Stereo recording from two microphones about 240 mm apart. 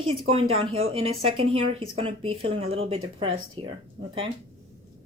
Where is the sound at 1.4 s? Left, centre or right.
Right.